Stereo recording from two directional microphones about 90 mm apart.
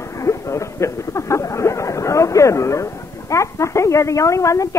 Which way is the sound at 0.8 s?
35° left (ahead or behind).